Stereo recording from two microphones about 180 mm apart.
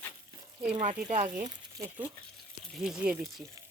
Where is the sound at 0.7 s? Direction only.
40° right (ahead or behind).